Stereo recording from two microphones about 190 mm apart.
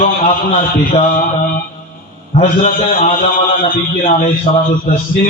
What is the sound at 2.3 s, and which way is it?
A man's voice, 35° left (ahead or behind).